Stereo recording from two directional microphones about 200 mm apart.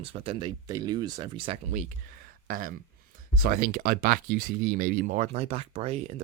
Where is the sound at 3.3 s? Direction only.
45° right (ahead or behind); by 6.2 s 30° right (ahead or behind).